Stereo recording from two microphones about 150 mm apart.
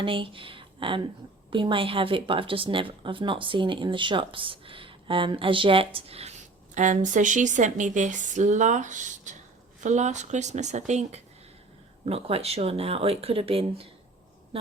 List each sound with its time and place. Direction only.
0.0 s speech: 35° right (ahead or behind)
6.7 s speech: 55° right (ahead or behind); by 14.7 s 40° right (ahead or behind)